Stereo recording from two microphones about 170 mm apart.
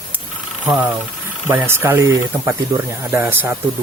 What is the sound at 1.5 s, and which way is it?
Speech, 10° right (ahead or behind).